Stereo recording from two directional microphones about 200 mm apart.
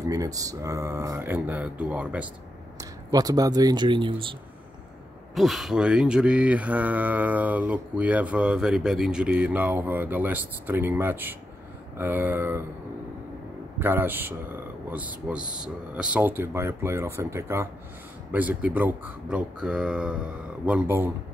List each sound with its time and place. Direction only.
0.0 s mantra: 15° right (ahead or behind)
2.8 s speech: 20° right (ahead or behind)
5.3 s mantra: centre (ahead or behind)
13.7 s mantra: 10° right (ahead or behind)